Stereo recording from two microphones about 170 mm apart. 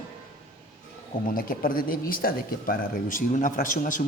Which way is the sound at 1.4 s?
55° left (ahead or behind).